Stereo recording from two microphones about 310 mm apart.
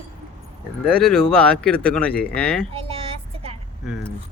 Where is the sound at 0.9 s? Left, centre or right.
Centre.